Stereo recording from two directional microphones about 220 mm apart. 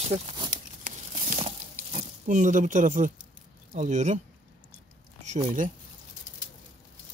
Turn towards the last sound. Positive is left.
turn(degrees=-35)  # may be behind; listen again after turning